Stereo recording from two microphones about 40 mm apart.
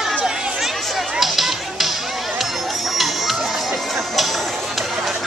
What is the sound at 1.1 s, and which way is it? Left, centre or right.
Music, centre.